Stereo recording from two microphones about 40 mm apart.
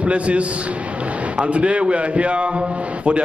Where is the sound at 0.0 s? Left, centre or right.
Right.